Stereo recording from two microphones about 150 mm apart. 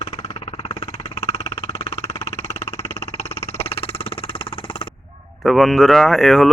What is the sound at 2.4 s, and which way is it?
Music, 45° left (ahead or behind).